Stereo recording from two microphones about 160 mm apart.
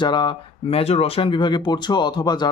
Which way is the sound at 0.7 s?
40° left (ahead or behind).